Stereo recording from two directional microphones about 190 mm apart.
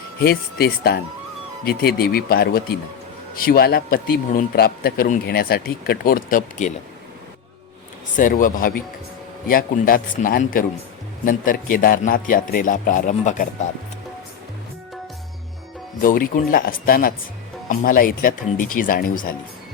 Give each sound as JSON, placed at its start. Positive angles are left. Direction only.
{"t": 0.2, "sound": "a man's voice", "side_deg": 55}
{"t": 8.1, "sound": "a man's voice", "side_deg": 45}
{"t": 16.0, "sound": "a man's voice", "side_deg": 45}